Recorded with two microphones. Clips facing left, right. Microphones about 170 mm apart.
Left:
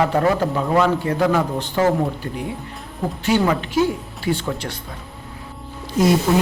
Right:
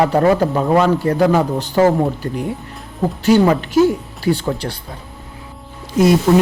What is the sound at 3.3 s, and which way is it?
Speech, 40° right (ahead or behind).